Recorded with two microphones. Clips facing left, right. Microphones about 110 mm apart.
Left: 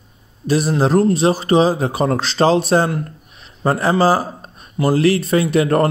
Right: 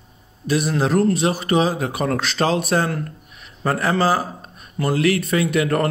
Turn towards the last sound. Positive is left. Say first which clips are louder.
# left 4 dB
turn(degrees=30)  # may be behind; listen again after turning